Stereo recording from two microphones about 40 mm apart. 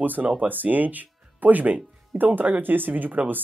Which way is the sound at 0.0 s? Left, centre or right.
Right.